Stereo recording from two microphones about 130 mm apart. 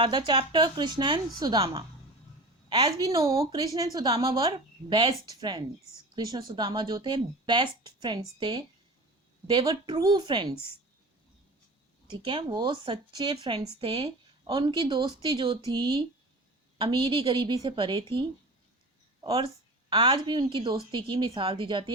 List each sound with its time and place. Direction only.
0.0 s speech: 40° right (ahead or behind)
2.6 s a woman's voice: 40° right (ahead or behind)
4.1 s speech: 45° right (ahead or behind)
12.1 s speech: 40° right (ahead or behind)
19.9 s speech: 40° right (ahead or behind)